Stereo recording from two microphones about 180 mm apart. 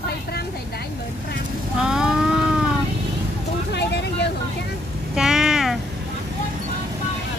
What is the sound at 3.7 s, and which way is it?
Vehicle, 70° left (ahead or behind).